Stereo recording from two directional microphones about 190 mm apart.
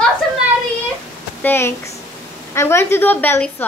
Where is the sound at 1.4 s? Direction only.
10° left (ahead or behind).